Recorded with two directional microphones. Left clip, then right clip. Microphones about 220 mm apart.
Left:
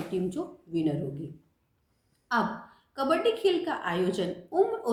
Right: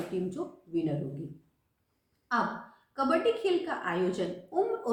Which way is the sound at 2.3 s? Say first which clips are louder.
Left 2 dB; 45° left (ahead or behind).